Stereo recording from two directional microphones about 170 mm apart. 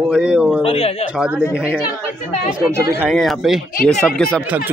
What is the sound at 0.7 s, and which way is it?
Speech, 35° left (ahead or behind).